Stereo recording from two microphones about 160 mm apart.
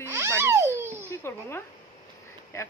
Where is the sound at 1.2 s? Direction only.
15° left (ahead or behind).